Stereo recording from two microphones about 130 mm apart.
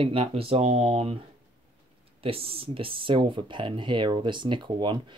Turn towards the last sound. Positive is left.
turn(degrees=-35)  # may be behind; listen again after turning